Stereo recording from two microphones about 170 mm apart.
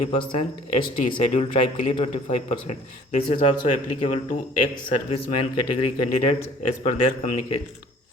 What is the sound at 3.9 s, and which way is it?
Speech, 40° left (ahead or behind).